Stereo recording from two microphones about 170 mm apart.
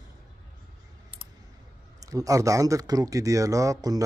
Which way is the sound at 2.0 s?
20° right (ahead or behind).